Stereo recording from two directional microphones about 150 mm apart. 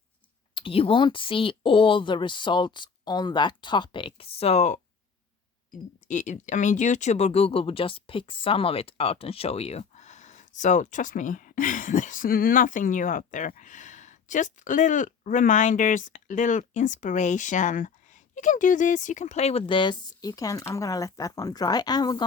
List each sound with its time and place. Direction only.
0.5 s speech: 35° left (ahead or behind)
6.1 s speech: 55° left (ahead or behind); by 22.2 s 25° left (ahead or behind)